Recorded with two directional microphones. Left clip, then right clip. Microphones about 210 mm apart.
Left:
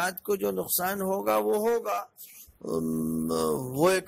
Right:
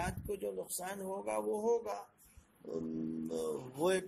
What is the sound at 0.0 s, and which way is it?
A man's voice, 40° left (ahead or behind).